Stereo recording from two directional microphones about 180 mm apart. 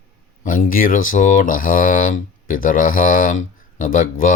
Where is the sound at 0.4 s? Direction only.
50° left (ahead or behind).